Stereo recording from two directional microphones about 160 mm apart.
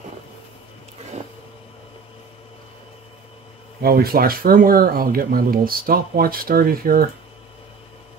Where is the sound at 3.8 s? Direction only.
70° right (ahead or behind).